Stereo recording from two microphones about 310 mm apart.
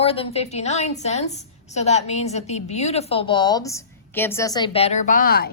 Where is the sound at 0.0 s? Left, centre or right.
Centre.